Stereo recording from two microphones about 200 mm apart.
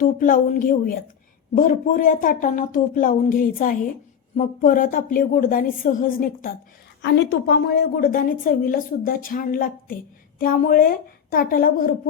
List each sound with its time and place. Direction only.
0.2 s a woman's voice: 40° left (ahead or behind)
7.0 s a woman's voice: 60° left (ahead or behind)